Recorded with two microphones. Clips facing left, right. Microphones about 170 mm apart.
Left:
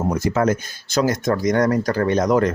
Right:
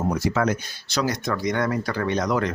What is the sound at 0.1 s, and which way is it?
Speech, 45° left (ahead or behind).